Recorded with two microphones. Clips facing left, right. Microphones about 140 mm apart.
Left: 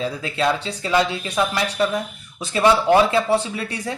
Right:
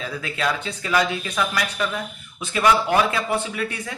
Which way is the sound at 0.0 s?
30° left (ahead or behind).